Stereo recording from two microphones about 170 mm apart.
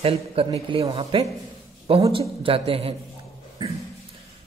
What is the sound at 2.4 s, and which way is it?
Speech, 35° right (ahead or behind).